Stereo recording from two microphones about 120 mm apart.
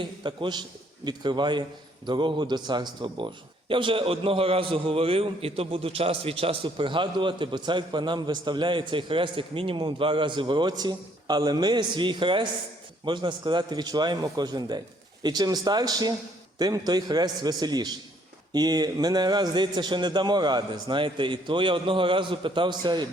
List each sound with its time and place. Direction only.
0.0 s a man's voice: 40° right (ahead or behind)